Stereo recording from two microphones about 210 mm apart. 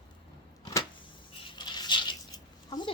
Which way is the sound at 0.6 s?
15° left (ahead or behind).